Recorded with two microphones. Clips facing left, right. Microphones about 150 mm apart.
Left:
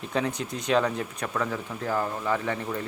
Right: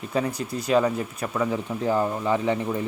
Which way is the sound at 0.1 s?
5° right (ahead or behind).